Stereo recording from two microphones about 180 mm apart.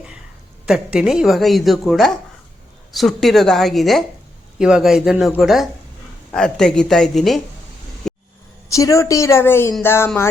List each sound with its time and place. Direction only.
0.7 s a woman's voice: 5° right (ahead or behind)
8.0 s a sound: centre (ahead or behind)
8.7 s a woman's voice: 15° left (ahead or behind)